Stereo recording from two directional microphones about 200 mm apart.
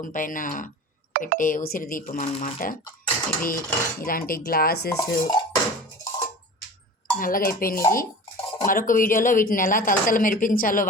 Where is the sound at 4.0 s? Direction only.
45° left (ahead or behind).